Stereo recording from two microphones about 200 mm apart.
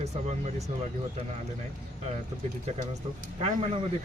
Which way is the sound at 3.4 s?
30° right (ahead or behind).